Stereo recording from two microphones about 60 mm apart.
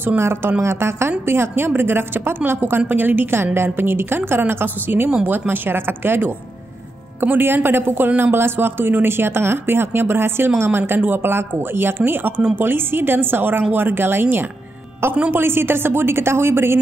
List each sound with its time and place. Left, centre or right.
0.2 s speech: right